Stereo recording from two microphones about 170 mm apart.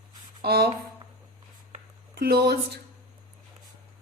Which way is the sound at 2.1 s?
65° right (ahead or behind).